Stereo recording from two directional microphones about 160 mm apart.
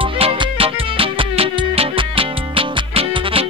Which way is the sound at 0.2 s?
35° right (ahead or behind).